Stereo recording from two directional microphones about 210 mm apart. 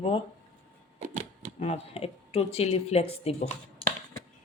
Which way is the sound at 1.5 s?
30° left (ahead or behind).